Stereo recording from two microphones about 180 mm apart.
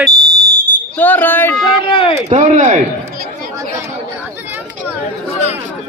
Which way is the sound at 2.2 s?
45° right (ahead or behind).